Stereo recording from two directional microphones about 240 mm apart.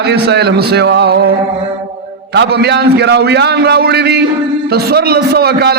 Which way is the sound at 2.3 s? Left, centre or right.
Right.